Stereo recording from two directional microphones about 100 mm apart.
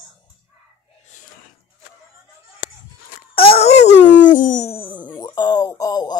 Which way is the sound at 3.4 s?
80° left.